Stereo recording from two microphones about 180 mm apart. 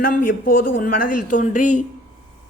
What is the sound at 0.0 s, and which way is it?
A man's voice, 55° left (ahead or behind).